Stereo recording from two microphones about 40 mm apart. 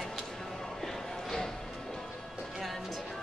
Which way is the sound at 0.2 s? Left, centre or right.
Centre.